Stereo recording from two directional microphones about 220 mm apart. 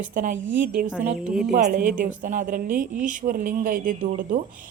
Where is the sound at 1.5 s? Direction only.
35° right (ahead or behind).